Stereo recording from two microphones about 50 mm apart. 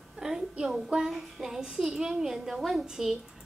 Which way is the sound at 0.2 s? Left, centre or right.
Centre.